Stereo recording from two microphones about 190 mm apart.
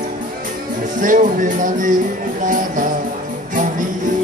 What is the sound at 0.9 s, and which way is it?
Music, 45° right (ahead or behind).